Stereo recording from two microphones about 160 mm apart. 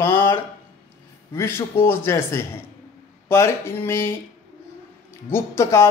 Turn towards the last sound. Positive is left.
turn(degrees=15)  # may be behind; listen again after turning